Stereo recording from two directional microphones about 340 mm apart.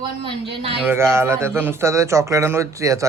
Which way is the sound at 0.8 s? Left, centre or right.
Centre.